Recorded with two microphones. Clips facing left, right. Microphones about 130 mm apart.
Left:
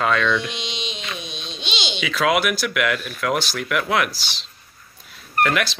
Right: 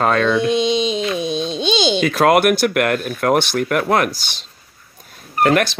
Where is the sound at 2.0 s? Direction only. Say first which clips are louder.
Right 5 dB; 50° right (ahead or behind).